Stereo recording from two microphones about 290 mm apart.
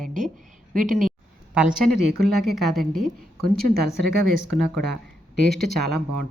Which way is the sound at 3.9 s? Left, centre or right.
Centre.